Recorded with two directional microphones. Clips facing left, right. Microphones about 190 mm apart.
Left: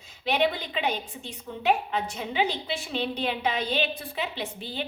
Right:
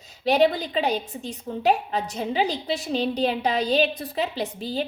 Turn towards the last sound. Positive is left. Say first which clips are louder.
# right 6 dB
turn(degrees=-40)  # may be behind; listen again after turning